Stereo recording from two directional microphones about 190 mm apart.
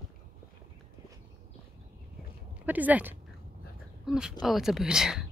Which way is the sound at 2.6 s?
10° right (ahead or behind).